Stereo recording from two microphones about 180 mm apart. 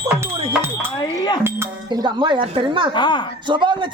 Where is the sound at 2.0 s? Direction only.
25° right (ahead or behind).